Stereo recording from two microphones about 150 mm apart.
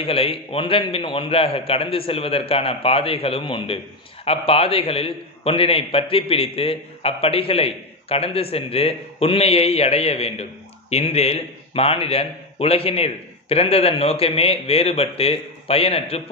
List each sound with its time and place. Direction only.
0.0 s a man's voice: 40° left (ahead or behind)